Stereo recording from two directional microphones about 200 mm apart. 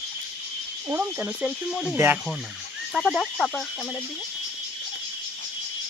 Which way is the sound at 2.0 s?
10° right (ahead or behind).